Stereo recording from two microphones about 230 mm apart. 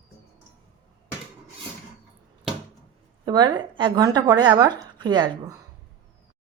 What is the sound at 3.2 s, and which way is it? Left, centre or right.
Speech, centre.